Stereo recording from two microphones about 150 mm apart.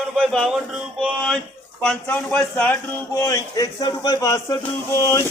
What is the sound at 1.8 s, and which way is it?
A man's voice, 10° left (ahead or behind).